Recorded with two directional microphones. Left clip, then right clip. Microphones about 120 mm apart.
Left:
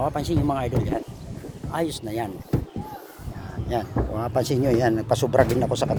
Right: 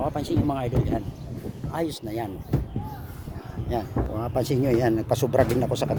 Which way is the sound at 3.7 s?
20° right (ahead or behind).